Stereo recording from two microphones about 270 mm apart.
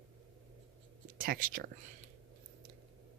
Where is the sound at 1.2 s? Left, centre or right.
Right.